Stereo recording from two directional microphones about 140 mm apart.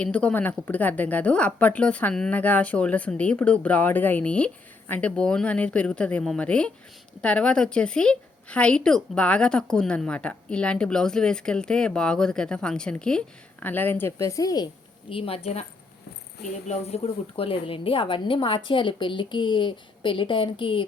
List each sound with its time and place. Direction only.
0.0 s a woman's voice: 10° left (ahead or behind); by 14.7 s 25° left (ahead or behind)
15.1 s a woman's voice: 40° left (ahead or behind)
16.6 s a woman's voice: 45° left (ahead or behind)